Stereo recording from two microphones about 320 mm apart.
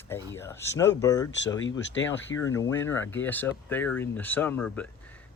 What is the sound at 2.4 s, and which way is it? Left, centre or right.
Speech, centre.